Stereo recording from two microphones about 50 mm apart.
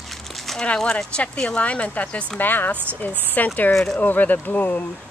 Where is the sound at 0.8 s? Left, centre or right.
Left.